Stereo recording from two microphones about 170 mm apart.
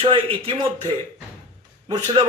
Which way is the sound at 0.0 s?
30° right (ahead or behind).